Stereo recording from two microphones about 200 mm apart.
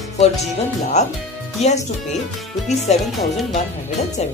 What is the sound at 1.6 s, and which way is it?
Speech, 35° left (ahead or behind).